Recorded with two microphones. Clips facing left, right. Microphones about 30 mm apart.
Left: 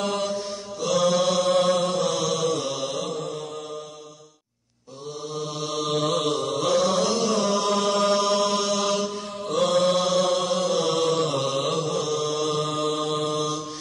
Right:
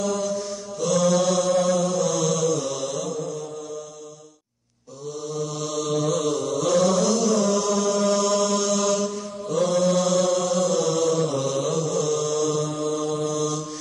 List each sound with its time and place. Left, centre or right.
0.0 s mantra: left
0.7 s mantra: centre
1.5 s mantra: left
3.0 s mantra: left
5.3 s mantra: left
5.9 s chant: left
6.7 s chant: left
7.7 s chant: left
8.2 s mantra: left
9.5 s mantra: left
9.9 s chant: left
11.9 s mantra: left
12.6 s mantra: left